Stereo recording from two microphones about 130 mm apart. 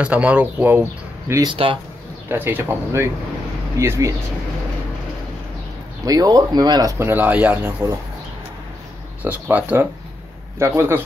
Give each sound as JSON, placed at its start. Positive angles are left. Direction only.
{"t": 0.0, "sound": "speech", "side_deg": -10}
{"t": 1.5, "sound": "speech", "side_deg": -40}
{"t": 2.2, "sound": "speech", "side_deg": -15}
{"t": 6.0, "sound": "speech", "side_deg": -30}
{"t": 9.2, "sound": "speech", "side_deg": -10}